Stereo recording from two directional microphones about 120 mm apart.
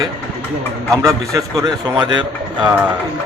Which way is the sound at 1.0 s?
30° right (ahead or behind).